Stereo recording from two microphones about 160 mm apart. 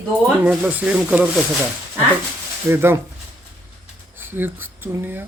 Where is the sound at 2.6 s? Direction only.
15° right (ahead or behind).